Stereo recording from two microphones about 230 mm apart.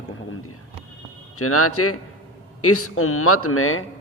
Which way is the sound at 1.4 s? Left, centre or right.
Left.